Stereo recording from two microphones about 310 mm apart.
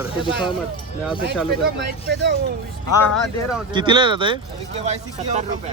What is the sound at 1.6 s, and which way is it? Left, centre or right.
Speech, right.